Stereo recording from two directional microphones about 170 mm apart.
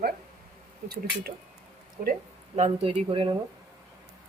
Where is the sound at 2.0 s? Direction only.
50° right (ahead or behind).